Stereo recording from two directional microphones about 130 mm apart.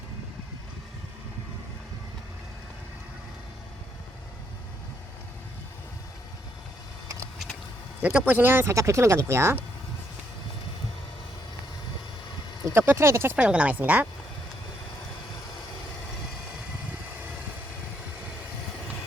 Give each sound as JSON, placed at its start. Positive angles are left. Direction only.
{"t": 8.0, "sound": "speech", "side_deg": -15}
{"t": 12.6, "sound": "speech", "side_deg": -15}
{"t": 13.3, "sound": "speech", "side_deg": -10}